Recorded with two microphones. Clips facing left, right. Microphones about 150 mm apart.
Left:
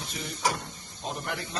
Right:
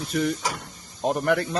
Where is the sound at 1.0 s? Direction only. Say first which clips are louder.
Right 12 dB; 60° right (ahead or behind).